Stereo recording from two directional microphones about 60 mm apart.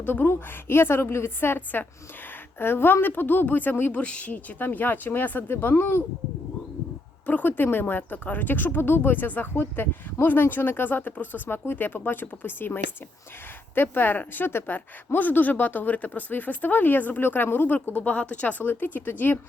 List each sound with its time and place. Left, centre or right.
0.0 s speech: left
3.9 s speech: left
7.3 s speech: left